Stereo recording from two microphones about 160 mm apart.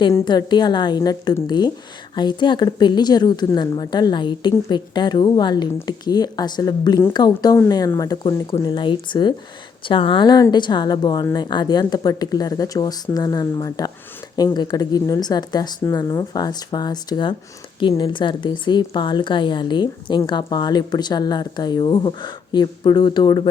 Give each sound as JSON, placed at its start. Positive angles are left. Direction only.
{"t": 0.3, "sound": "a woman's voice", "side_deg": 25}